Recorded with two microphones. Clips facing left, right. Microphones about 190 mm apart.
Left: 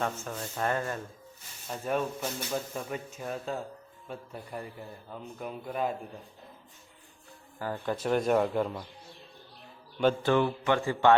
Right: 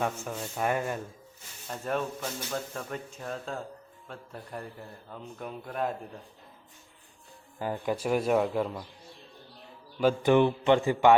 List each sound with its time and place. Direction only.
0.0 s speech: 10° right (ahead or behind)
1.6 s speech: 5° left (ahead or behind)
7.6 s speech: 15° right (ahead or behind)
10.2 s a man's voice: 20° right (ahead or behind)